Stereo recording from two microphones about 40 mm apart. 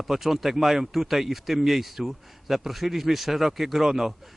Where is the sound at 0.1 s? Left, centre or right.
Centre.